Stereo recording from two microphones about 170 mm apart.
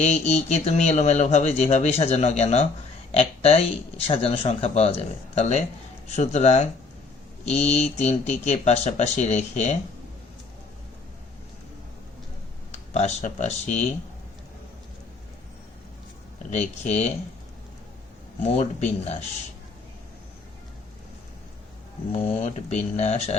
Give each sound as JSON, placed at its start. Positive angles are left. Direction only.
{"t": 0.0, "sound": "speech", "side_deg": 40}
{"t": 12.7, "sound": "speech", "side_deg": 40}
{"t": 16.5, "sound": "speech", "side_deg": 40}
{"t": 18.4, "sound": "speech", "side_deg": 45}
{"t": 22.1, "sound": "speech", "side_deg": 40}